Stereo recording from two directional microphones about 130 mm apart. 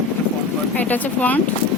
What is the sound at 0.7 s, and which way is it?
Speech, 15° left (ahead or behind).